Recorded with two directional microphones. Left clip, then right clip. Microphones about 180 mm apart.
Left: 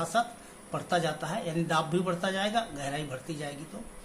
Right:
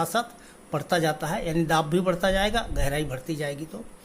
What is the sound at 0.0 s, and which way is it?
Speech, 50° right (ahead or behind).